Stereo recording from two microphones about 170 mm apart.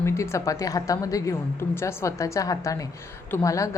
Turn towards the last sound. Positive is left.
turn(degrees=20)  # may be behind; listen again after turning